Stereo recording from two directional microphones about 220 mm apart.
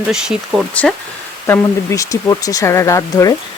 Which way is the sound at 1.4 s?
10° left (ahead or behind).